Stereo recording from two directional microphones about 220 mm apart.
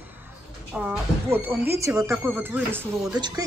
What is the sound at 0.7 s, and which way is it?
A woman's voice, 10° right (ahead or behind).